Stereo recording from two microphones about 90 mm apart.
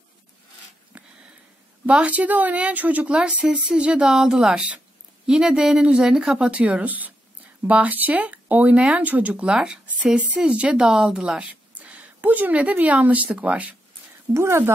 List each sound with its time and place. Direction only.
0.9 s sniff: 15° right (ahead or behind)
1.9 s speech: 15° right (ahead or behind)
14.3 s speech: 30° right (ahead or behind)